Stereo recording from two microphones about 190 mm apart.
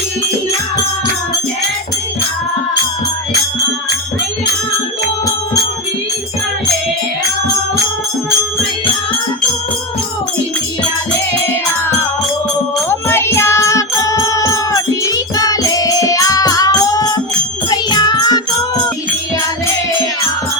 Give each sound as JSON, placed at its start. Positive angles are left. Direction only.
{"t": 12.9, "sound": "music", "side_deg": 10}